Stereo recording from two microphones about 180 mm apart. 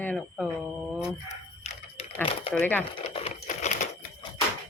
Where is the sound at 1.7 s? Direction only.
40° left (ahead or behind).